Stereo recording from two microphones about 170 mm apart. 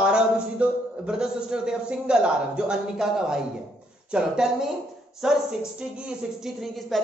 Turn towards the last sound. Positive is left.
turn(degrees=0)  # may be behind; listen again after turning